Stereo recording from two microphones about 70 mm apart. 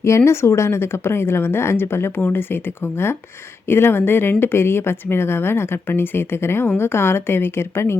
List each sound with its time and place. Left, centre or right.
0.3 s speech: left